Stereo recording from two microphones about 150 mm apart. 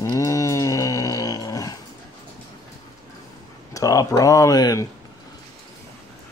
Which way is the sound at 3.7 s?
20° left (ahead or behind).